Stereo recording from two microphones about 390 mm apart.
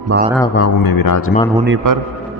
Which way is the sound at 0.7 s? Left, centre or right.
Left.